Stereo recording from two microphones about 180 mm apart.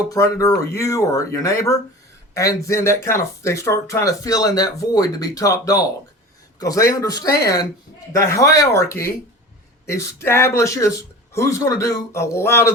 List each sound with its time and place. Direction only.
0.1 s speech: 20° left (ahead or behind)